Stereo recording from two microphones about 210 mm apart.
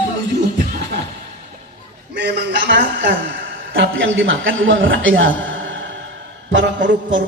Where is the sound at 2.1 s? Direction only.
55° right (ahead or behind).